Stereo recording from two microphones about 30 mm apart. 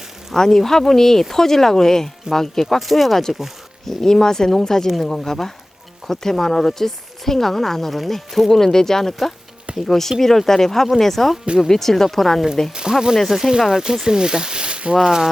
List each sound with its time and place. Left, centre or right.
0.3 s speech: centre
2.7 s speech: centre
3.8 s speech: centre
8.4 s speech: centre
11.4 s speech: right
11.7 s speech: centre
12.9 s speech: right
13.2 s speech: centre; by 14.9 s right
14.9 s speech: centre